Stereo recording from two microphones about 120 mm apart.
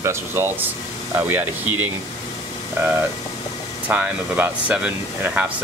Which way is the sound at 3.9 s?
15° right (ahead or behind).